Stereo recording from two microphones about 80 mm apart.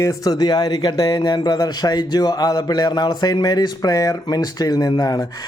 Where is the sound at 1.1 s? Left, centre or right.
Left.